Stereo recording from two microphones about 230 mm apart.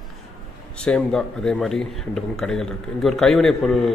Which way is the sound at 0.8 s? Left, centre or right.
Centre.